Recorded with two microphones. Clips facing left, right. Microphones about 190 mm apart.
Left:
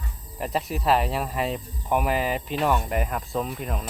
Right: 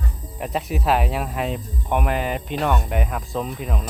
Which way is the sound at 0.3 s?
Centre (ahead or behind).